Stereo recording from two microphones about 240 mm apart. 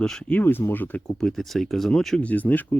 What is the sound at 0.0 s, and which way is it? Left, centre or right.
Speech, centre.